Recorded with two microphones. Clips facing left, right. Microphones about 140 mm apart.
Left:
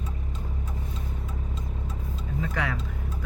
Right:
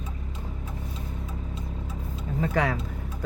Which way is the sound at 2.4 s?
40° right (ahead or behind).